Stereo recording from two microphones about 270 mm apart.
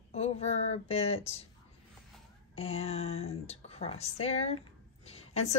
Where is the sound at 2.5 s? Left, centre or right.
Left.